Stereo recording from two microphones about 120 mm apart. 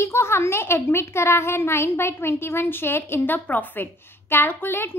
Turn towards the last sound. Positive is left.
turn(degrees=20)  # may be behind; listen again after turning